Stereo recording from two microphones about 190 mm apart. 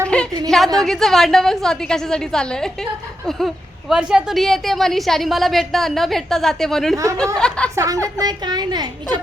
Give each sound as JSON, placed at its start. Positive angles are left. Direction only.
{"t": 0.1, "sound": "a sound", "side_deg": 5}
{"t": 0.5, "sound": "a woman's voice", "side_deg": 0}
{"t": 6.9, "sound": "speech", "side_deg": -15}
{"t": 7.3, "sound": "a woman's voice", "side_deg": 5}
{"t": 7.8, "sound": "a child's voice", "side_deg": -15}